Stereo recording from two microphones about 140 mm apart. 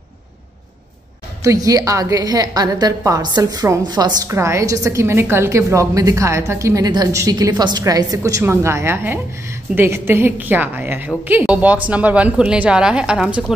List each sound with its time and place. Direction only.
1.4 s a woman's voice: 25° right (ahead or behind); by 13.5 s 5° right (ahead or behind)